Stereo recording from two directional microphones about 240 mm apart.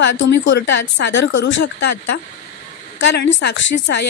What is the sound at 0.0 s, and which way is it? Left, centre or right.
Speech, left.